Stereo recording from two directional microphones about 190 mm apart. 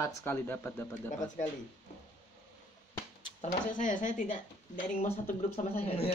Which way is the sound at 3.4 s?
40° left (ahead or behind).